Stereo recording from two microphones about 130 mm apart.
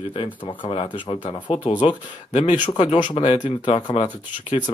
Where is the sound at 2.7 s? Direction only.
40° left (ahead or behind).